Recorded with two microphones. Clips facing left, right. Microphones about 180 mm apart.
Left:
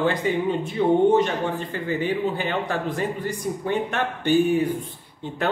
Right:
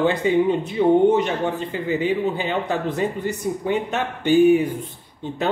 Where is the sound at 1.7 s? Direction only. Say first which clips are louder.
Right 4 dB; 15° right (ahead or behind).